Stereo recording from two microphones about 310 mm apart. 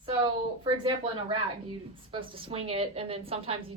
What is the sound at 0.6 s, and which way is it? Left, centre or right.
A woman's voice, centre.